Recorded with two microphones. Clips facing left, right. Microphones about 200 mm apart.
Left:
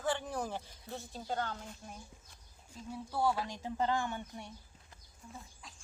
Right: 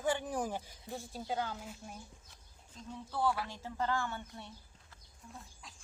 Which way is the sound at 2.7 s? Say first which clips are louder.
Left 2 dB; 10° left (ahead or behind).